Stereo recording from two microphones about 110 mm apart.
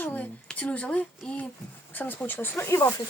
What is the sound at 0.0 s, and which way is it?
Speech, 15° left (ahead or behind).